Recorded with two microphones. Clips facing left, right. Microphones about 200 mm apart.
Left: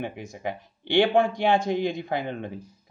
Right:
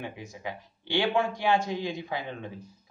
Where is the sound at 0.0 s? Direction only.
55° left (ahead or behind).